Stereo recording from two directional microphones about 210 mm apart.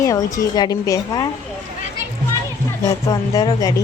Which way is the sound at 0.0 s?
15° left (ahead or behind).